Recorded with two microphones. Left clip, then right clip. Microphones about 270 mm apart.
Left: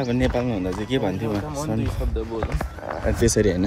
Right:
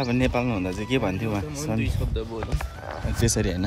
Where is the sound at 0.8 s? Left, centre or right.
Centre.